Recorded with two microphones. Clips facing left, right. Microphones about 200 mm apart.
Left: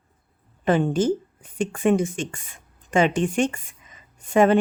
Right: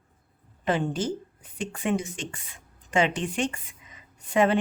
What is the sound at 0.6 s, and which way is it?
A woman's voice, 50° left (ahead or behind).